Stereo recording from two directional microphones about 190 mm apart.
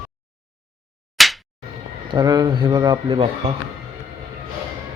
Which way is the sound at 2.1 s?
20° right (ahead or behind).